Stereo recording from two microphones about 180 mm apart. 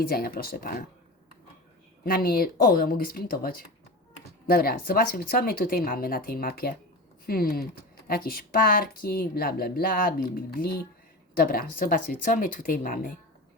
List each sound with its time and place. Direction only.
0.0 s speech: 55° left (ahead or behind)
2.0 s speech: 55° left (ahead or behind)